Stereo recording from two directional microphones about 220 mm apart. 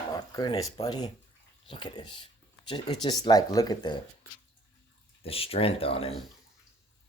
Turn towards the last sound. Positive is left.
turn(degrees=25)  # may be behind; listen again after turning